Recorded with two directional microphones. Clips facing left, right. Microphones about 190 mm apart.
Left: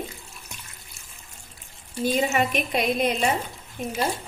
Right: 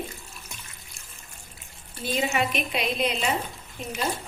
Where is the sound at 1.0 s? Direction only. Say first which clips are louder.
Right 1 dB; 5° left (ahead or behind).